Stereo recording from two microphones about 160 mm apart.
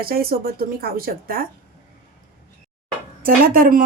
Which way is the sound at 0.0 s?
70° right (ahead or behind).